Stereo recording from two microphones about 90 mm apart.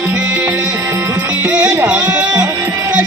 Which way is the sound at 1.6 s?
10° right (ahead or behind).